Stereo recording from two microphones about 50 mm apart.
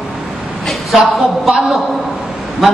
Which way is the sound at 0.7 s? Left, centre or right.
Centre.